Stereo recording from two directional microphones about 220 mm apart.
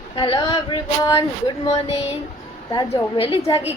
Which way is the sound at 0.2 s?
20° left (ahead or behind).